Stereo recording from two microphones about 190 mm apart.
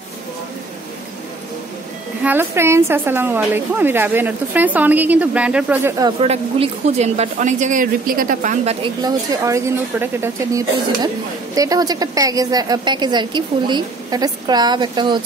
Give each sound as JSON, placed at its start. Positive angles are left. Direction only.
{"t": 2.2, "sound": "a woman's voice", "side_deg": -10}
{"t": 6.2, "sound": "speech", "side_deg": -35}
{"t": 8.8, "sound": "a woman's voice", "side_deg": -20}